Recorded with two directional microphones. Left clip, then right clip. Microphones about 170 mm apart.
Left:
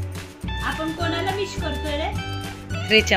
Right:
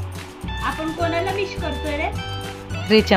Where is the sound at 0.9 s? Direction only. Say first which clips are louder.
Right 3 dB; centre (ahead or behind).